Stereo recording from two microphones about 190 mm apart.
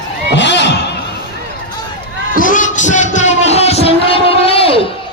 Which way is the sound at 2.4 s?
45° left (ahead or behind).